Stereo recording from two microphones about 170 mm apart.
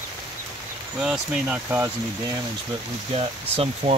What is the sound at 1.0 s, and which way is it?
Speech, 5° right (ahead or behind).